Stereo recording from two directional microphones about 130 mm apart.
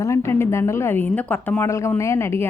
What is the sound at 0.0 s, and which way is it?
A woman's voice, 20° left (ahead or behind).